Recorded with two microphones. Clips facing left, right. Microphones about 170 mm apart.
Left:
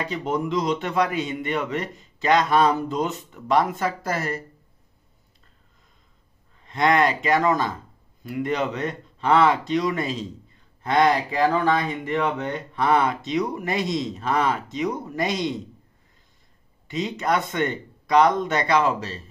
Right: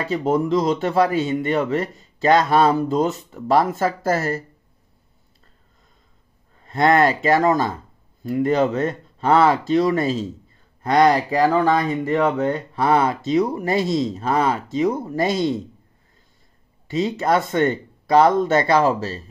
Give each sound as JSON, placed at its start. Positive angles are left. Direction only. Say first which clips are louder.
{"t": 0.0, "sound": "speech", "louder": "right 6 dB", "side_deg": -40}
{"t": 6.6, "sound": "speech", "louder": "right 4 dB", "side_deg": -40}
{"t": 16.9, "sound": "speech", "louder": "right 5 dB", "side_deg": -40}